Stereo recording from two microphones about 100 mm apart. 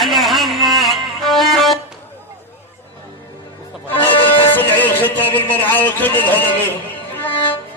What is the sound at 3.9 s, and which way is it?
Music, 20° left (ahead or behind).